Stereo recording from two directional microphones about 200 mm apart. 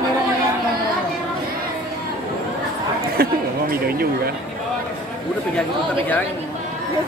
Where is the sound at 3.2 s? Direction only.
50° right (ahead or behind).